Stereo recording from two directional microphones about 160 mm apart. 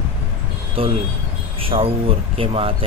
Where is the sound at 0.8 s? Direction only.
35° right (ahead or behind).